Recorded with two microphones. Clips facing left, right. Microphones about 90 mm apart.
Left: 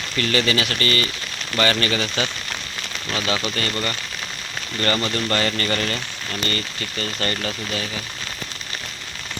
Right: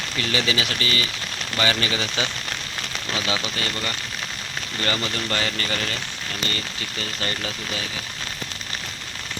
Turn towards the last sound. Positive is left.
turn(degrees=-5)  # may be behind; listen again after turning